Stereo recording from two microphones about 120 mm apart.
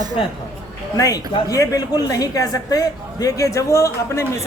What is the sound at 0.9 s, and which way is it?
A woman's voice, 30° left (ahead or behind).